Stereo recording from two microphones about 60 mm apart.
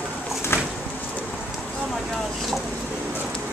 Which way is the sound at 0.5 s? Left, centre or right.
Left.